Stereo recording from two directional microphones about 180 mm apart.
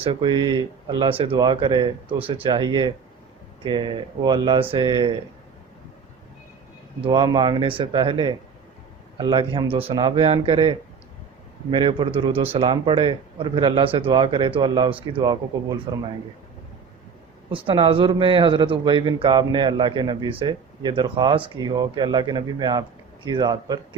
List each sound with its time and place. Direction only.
0.0 s speech: 30° right (ahead or behind)
7.0 s speech: 25° right (ahead or behind)
17.5 s speech: 30° right (ahead or behind)